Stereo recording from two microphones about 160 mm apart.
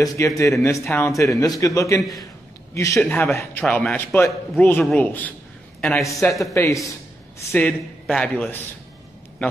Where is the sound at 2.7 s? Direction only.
20° left (ahead or behind); by 6.0 s centre (ahead or behind).